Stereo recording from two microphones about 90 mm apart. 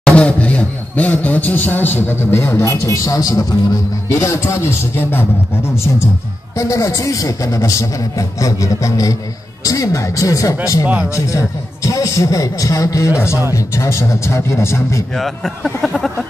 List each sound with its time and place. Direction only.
0.0 s a man's voice: 10° left (ahead or behind); by 6.0 s 25° left (ahead or behind)
6.5 s a man's voice: 40° left (ahead or behind)
15.1 s speech: 5° left (ahead or behind)